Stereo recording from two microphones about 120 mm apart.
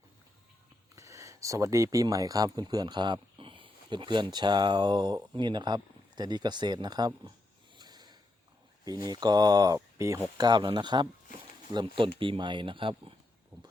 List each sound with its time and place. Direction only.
0.9 s speech: 25° right (ahead or behind)
7.8 s a sound: 35° right (ahead or behind)
8.8 s speech: 35° right (ahead or behind)
10.3 s speech: 35° right (ahead or behind)
13.5 s clip-clop: 15° right (ahead or behind)